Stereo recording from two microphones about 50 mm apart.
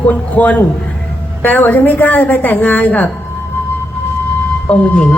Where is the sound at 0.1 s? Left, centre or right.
Left.